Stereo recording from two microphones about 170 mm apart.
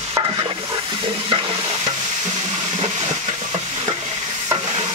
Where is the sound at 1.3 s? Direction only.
30° right (ahead or behind).